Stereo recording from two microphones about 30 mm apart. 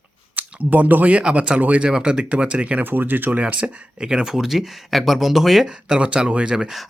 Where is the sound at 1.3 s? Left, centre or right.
Right.